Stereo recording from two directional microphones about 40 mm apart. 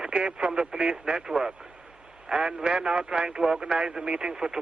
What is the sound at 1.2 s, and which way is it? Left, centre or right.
A man's voice, centre.